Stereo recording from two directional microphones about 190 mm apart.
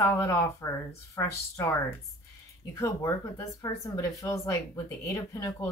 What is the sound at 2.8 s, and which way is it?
Speech, 15° left (ahead or behind).